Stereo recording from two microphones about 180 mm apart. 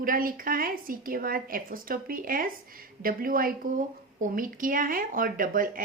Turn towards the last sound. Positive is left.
turn(degrees=-50)  # may be behind; listen again after turning